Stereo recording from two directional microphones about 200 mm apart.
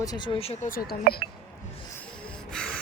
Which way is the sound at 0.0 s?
20° left (ahead or behind).